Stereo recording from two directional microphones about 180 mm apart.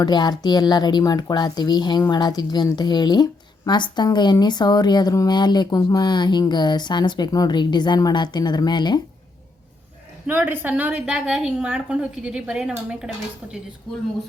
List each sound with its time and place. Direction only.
0.0 s speech: 25° left (ahead or behind)
10.2 s a woman's voice: 10° right (ahead or behind)